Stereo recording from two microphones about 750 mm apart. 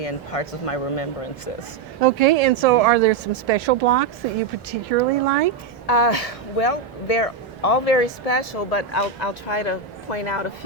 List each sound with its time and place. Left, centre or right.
0.0 s speech: left
2.0 s speech: right
5.8 s speech: left